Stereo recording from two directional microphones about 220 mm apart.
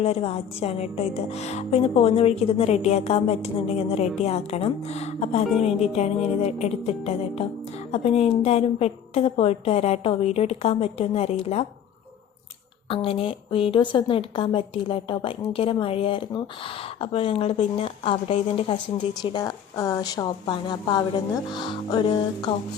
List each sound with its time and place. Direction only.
0.0 s a woman's voice: 25° left (ahead or behind)
12.9 s a woman's voice: 25° left (ahead or behind)